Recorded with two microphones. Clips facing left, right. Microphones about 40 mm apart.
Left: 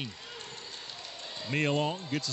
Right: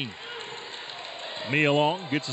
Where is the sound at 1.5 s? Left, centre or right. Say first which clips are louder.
Right 7 dB; right.